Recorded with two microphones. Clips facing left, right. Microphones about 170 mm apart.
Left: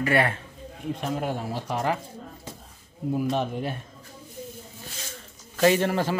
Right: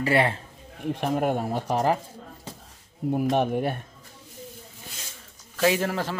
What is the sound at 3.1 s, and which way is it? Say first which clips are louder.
Speech: right 3 dB; 50° right (ahead or behind).